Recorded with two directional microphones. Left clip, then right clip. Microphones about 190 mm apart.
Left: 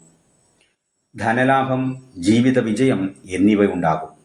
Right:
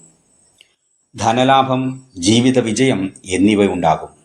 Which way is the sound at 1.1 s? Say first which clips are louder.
Right 4 dB; 20° right (ahead or behind).